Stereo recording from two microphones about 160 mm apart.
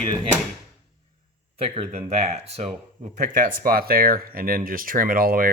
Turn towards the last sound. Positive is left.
turn(degrees=-65)  # may be behind; listen again after turning